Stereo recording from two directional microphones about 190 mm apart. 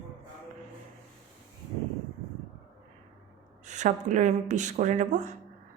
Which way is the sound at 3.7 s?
40° right (ahead or behind).